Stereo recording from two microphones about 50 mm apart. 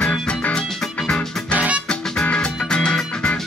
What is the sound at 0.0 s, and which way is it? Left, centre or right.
Music, left.